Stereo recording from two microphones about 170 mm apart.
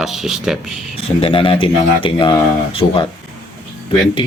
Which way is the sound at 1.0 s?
35° left (ahead or behind).